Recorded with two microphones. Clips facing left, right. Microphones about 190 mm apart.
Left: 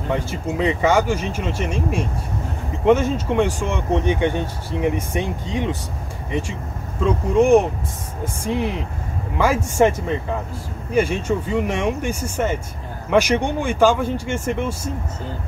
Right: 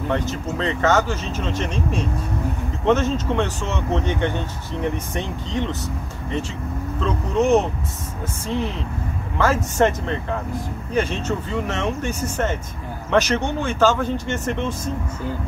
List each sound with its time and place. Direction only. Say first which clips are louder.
0.1 s speech: left 2 dB; 10° left (ahead or behind)
7.0 s speech: left 4 dB; 10° left (ahead or behind)